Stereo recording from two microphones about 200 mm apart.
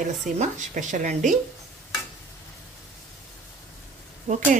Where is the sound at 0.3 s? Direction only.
40° right (ahead or behind).